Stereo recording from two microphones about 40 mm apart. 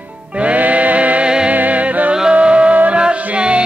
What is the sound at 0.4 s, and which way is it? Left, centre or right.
Music, right.